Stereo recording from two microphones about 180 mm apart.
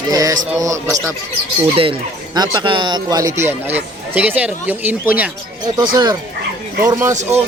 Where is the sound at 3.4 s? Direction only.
10° right (ahead or behind).